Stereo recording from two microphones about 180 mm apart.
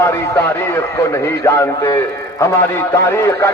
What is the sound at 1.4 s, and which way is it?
Speech, 15° left (ahead or behind).